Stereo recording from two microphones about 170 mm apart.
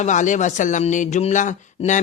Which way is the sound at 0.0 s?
45° left (ahead or behind).